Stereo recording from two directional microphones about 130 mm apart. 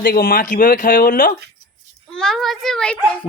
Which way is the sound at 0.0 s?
90° left.